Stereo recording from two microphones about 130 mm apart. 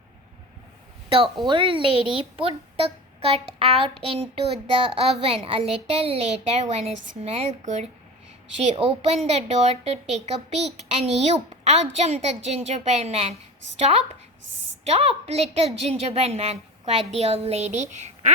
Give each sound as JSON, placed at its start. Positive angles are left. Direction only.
{"t": 1.5, "sound": "a child's voice", "side_deg": -40}
{"t": 8.6, "sound": "a woman's voice", "side_deg": -50}